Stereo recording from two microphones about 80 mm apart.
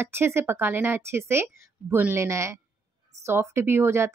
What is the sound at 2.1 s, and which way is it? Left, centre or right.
A woman's voice, right.